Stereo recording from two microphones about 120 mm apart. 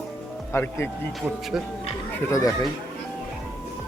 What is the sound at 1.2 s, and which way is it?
Speech, centre (ahead or behind).